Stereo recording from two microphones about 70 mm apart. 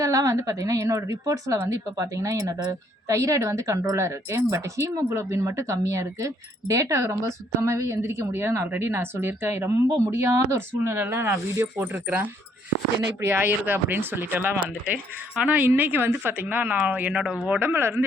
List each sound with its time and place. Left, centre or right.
0.0 s speech: right
13.3 s a woman's voice: right
17.7 s speech: right